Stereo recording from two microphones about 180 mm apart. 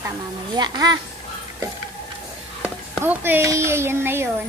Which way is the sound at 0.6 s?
20° right (ahead or behind).